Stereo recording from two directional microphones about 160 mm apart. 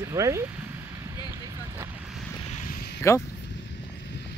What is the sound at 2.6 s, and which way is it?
Vehicle, 60° left (ahead or behind).